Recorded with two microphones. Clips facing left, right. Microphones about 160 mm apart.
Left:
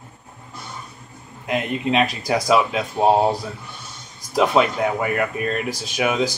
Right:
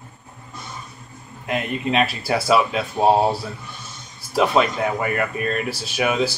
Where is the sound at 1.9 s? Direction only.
15° left (ahead or behind).